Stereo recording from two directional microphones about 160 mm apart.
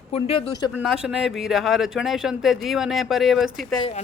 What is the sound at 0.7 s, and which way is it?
Speech, 5° right (ahead or behind).